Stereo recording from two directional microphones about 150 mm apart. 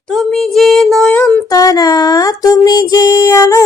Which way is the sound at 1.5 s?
25° left (ahead or behind).